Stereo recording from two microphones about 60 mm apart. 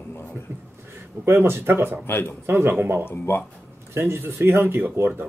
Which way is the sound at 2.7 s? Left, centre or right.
Right.